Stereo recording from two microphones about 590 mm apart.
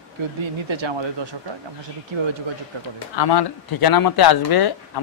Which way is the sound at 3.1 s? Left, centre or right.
Left.